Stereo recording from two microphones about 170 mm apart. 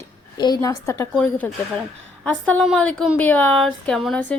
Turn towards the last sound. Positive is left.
turn(degrees=5)  # may be behind; listen again after turning